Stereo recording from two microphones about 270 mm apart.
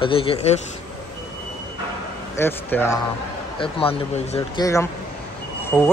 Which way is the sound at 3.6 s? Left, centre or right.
Left.